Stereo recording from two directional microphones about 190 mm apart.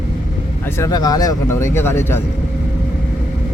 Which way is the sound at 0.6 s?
15° left (ahead or behind).